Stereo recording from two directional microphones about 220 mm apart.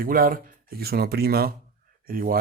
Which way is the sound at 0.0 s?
40° right (ahead or behind).